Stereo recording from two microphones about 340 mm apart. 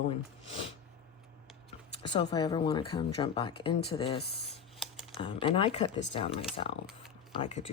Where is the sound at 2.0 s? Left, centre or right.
Centre.